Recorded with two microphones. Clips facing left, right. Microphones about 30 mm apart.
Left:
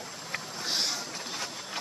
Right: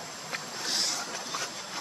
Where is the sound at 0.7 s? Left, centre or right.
Centre.